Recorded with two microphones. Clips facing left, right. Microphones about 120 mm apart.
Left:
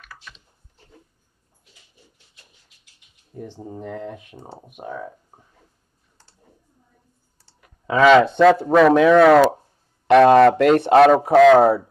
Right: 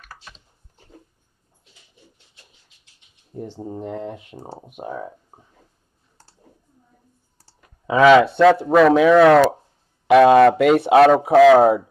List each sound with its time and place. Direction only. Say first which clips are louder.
0.0 s typing: right 1 dB; 40° right (ahead or behind)
3.3 s speech: right 3 dB; 30° right (ahead or behind)
3.6 s speech: right 2 dB; 20° right (ahead or behind)
7.8 s speech: right 1 dB; 10° right (ahead or behind)